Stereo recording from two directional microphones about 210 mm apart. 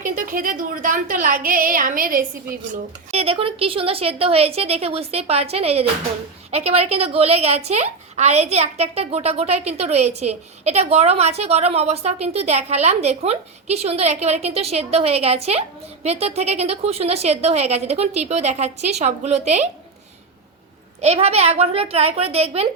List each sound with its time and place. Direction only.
0.0 s a woman's voice: 40° right (ahead or behind)
3.1 s a woman's voice: 30° right (ahead or behind)
21.0 s a woman's voice: 30° right (ahead or behind)